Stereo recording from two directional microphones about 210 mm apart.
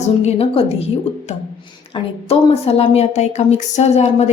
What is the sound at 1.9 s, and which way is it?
A woman's voice, 30° left (ahead or behind).